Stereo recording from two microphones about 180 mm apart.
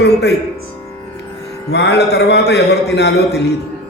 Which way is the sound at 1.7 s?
70° left (ahead or behind).